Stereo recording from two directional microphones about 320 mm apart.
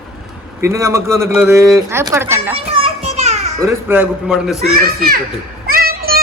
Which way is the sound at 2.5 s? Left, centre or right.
Centre.